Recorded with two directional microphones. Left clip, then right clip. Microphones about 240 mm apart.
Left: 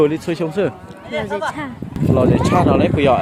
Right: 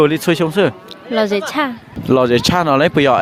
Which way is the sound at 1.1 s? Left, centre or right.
Right.